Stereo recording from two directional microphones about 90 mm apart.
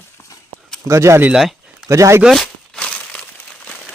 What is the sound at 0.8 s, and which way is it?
Speech, 35° right (ahead or behind).